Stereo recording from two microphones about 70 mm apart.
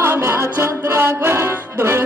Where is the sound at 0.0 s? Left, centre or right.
Right.